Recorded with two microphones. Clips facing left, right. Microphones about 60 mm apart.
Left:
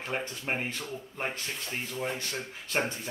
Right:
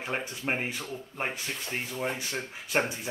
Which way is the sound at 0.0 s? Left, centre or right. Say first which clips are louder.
Right 1 dB; centre.